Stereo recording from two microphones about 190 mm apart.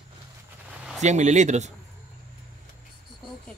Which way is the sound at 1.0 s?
40° right (ahead or behind).